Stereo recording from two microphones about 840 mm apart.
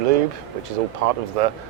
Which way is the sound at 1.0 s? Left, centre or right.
Right.